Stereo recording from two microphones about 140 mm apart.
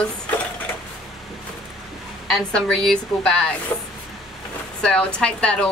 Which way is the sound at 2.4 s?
5° left (ahead or behind).